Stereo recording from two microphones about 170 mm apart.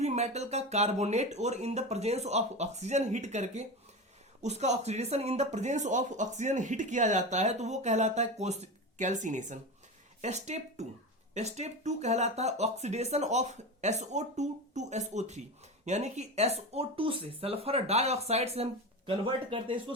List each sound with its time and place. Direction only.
0.0 s speech: 40° right (ahead or behind)